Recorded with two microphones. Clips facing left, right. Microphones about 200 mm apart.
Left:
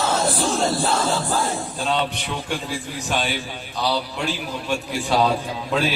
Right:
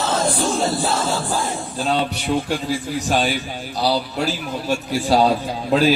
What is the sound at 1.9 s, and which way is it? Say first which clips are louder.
A man's voice: right 5 dB; 40° right (ahead or behind).